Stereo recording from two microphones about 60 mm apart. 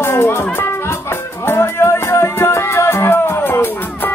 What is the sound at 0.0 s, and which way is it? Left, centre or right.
Music, left.